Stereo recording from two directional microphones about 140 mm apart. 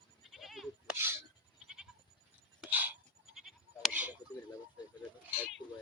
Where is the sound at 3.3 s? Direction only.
Centre (ahead or behind).